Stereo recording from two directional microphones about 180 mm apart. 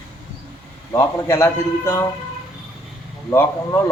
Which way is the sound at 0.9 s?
15° left (ahead or behind).